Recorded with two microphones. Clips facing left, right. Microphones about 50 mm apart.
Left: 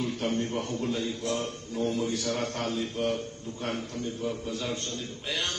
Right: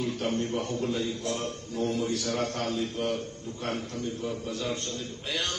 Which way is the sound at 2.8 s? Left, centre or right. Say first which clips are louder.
Even; centre.